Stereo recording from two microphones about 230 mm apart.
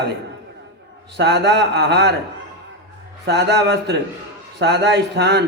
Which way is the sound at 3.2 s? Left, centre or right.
Right.